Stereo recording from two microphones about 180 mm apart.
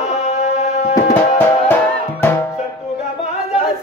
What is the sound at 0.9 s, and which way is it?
Music, 10° left (ahead or behind).